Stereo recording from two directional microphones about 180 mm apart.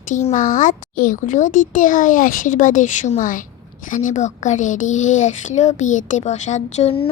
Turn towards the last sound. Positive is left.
turn(degrees=35)  # may be behind; listen again after turning